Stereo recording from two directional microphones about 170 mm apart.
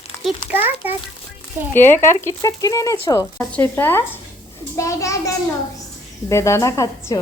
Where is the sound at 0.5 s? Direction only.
10° right (ahead or behind).